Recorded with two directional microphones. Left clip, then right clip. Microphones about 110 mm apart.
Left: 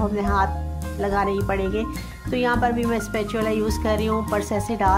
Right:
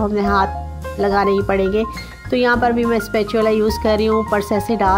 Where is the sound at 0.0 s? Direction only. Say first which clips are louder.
Right 5 dB; 40° right (ahead or behind).